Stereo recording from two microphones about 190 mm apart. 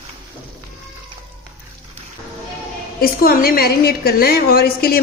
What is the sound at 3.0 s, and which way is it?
A woman's voice, 50° left (ahead or behind).